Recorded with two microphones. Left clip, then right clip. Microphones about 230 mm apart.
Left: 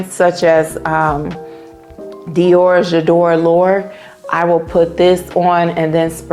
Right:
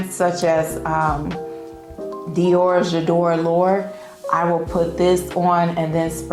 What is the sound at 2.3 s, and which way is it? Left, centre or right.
A woman's voice, left.